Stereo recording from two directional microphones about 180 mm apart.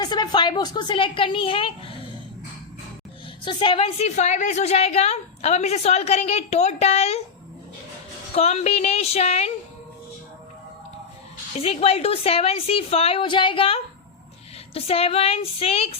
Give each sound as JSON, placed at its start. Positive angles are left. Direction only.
{"t": 0.0, "sound": "a woman's voice", "side_deg": 25}
{"t": 3.4, "sound": "a woman's voice", "side_deg": 30}
{"t": 8.4, "sound": "a woman's voice", "side_deg": 35}
{"t": 11.6, "sound": "a woman's voice", "side_deg": 35}